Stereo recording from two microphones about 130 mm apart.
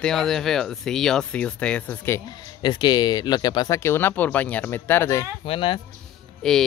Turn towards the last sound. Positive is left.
turn(degrees=5)  # may be behind; listen again after turning